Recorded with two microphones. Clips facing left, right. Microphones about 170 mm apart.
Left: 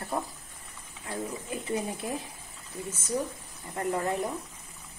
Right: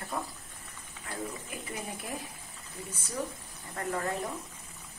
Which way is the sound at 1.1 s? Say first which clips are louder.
Left 4 dB; 25° left (ahead or behind).